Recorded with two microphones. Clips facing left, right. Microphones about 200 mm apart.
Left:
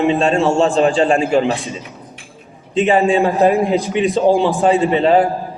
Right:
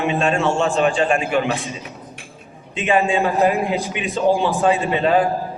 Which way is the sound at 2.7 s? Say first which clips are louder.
Left 5 dB; 30° left (ahead or behind).